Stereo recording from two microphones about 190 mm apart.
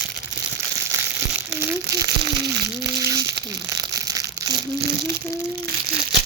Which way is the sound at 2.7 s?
15° right (ahead or behind).